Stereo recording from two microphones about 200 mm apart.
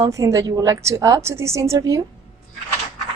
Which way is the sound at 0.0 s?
15° right (ahead or behind).